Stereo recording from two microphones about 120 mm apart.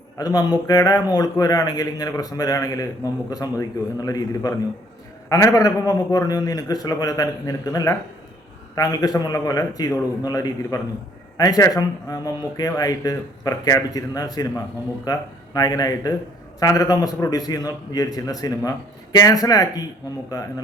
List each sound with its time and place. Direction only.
0.2 s a man's voice: 30° left (ahead or behind)